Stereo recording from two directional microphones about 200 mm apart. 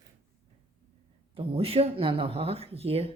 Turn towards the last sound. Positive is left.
turn(degrees=-30)  # may be behind; listen again after turning